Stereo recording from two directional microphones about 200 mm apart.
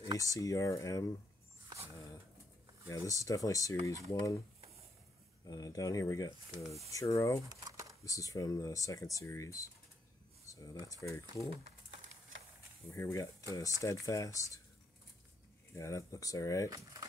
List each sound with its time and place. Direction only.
0.0 s a sound: 15° right (ahead or behind)
0.3 s speech: 15° left (ahead or behind)
2.0 s a sound: 15° left (ahead or behind)
2.9 s speech: 15° left (ahead or behind)
5.4 s speech: 20° left (ahead or behind)
7.4 s a sound: 15° right (ahead or behind)
8.0 s speech: 15° left (ahead or behind)
11.5 s crumpling: 30° right (ahead or behind)
12.9 s speech: 15° left (ahead or behind)
15.7 s speech: 15° left (ahead or behind)
16.6 s speech: 15° right (ahead or behind)